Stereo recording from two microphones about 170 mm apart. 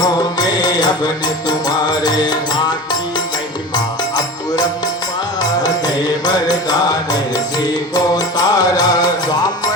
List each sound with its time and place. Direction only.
0.0 s music: 20° left (ahead or behind)
6.2 s music: 20° left (ahead or behind)